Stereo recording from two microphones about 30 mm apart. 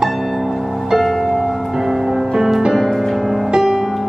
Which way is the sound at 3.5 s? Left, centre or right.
Right.